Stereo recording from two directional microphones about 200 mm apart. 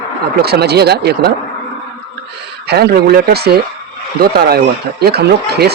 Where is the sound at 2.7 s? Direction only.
55° right (ahead or behind).